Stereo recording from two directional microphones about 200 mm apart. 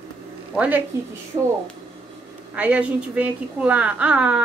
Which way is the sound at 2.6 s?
5° right (ahead or behind).